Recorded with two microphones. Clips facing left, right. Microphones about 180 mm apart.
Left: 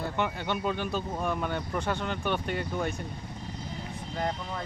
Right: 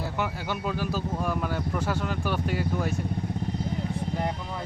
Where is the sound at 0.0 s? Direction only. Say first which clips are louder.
Even; 5° right (ahead or behind).